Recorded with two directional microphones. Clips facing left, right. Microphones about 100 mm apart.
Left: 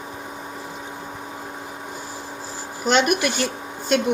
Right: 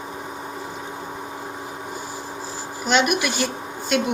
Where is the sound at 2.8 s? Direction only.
40° left (ahead or behind).